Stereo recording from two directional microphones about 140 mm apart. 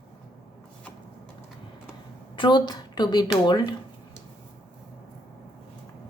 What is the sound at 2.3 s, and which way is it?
Speech, 35° left (ahead or behind).